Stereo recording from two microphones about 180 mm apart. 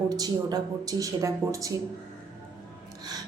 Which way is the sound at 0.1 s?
20° right (ahead or behind).